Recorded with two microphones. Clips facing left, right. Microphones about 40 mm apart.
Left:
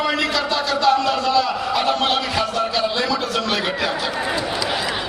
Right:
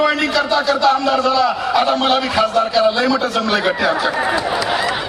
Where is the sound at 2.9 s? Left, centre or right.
Right.